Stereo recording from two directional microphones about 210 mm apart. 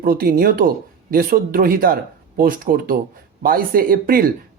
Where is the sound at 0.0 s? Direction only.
45° right (ahead or behind).